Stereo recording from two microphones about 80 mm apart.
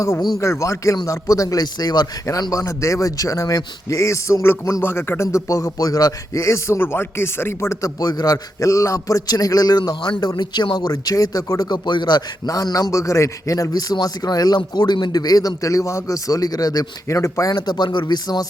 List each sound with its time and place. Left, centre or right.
0.3 s a man's voice: left
2.2 s a man's voice: left
7.8 s a man's voice: left
12.9 s a man's voice: left
17.5 s speech: left